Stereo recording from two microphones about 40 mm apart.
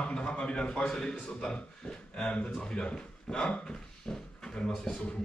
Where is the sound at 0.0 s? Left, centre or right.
Left.